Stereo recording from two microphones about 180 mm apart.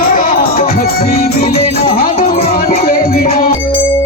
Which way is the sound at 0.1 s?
50° left (ahead or behind).